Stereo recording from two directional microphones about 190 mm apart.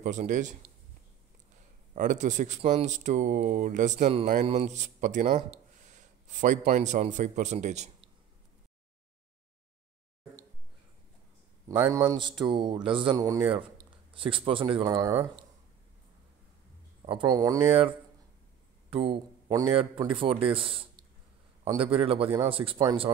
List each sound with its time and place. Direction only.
0.0 s speech: 40° right (ahead or behind)
2.0 s a man's voice: 40° right (ahead or behind)
11.9 s speech: 20° right (ahead or behind)
17.0 s speech: 25° right (ahead or behind)
18.9 s speech: 30° right (ahead or behind)